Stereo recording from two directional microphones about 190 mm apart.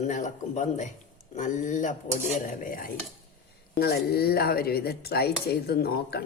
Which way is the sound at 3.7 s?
55° left (ahead or behind).